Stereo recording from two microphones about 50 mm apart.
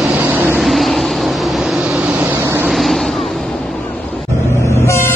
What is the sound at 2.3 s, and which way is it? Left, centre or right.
Vehicle, right.